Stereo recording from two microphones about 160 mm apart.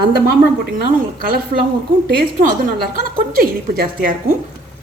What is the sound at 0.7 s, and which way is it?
A woman's voice, 65° right (ahead or behind).